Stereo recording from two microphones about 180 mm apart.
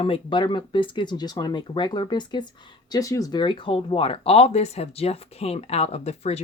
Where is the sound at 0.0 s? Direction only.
30° left (ahead or behind).